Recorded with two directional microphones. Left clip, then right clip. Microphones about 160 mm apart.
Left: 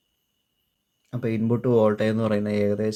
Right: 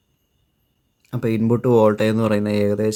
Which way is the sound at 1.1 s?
35° right (ahead or behind).